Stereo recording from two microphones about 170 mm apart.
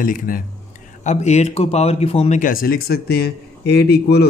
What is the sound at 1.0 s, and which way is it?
A man's voice, 40° left (ahead or behind).